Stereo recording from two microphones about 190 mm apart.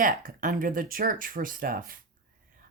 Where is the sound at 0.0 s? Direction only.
45° right (ahead or behind).